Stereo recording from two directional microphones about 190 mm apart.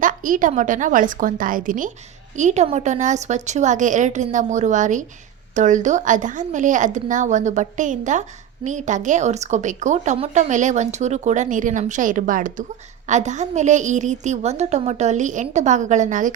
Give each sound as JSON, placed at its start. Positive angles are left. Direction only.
{"t": 0.0, "sound": "a woman's voice", "side_deg": -45}